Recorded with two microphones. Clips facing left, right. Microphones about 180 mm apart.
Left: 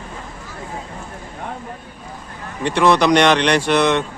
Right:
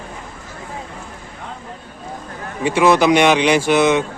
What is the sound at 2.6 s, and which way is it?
Speech, 5° right (ahead or behind).